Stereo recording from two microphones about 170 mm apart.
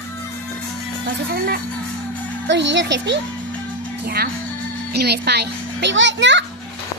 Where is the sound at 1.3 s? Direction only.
60° right (ahead or behind).